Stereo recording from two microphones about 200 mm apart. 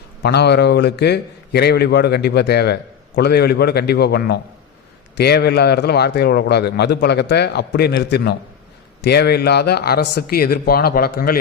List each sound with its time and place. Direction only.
0.2 s speech: 55° left (ahead or behind)